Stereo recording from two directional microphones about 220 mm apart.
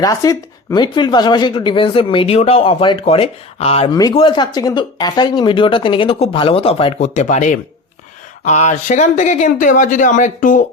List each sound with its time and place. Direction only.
0.0 s speech: 15° left (ahead or behind); by 10.6 s 35° left (ahead or behind)